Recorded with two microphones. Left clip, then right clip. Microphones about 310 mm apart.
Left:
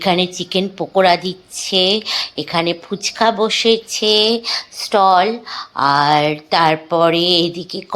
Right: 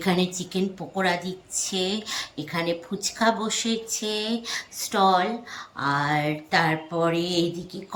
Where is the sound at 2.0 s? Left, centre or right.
Centre.